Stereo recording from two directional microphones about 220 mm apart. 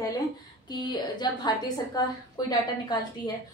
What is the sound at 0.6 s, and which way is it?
Speech, 20° left (ahead or behind).